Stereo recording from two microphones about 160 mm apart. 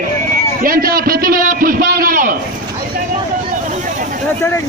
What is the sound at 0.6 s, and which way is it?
A man's voice, 65° right (ahead or behind).